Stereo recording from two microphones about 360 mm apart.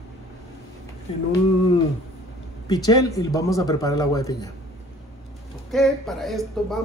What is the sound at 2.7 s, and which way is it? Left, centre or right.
Speech, centre.